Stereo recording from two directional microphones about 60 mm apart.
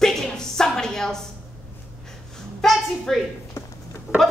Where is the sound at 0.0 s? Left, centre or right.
Centre.